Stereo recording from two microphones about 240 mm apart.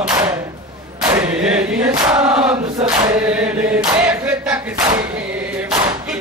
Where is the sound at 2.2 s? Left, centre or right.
Centre.